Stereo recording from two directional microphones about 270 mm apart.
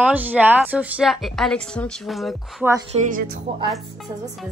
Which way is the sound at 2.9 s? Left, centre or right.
Right.